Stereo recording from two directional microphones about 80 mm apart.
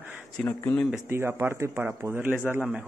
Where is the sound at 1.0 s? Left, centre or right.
Right.